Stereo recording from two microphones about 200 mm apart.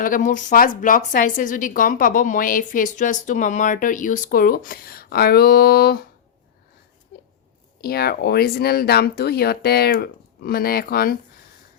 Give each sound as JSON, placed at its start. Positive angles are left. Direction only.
{"t": 0.0, "sound": "a woman's voice", "side_deg": 40}
{"t": 7.8, "sound": "a woman's voice", "side_deg": 50}